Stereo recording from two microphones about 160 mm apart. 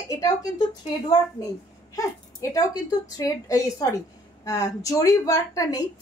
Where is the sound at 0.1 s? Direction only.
25° left (ahead or behind).